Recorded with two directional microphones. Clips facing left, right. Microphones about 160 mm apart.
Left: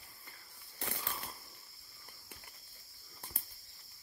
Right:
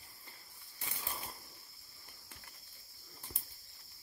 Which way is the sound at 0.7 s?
75° left (ahead or behind).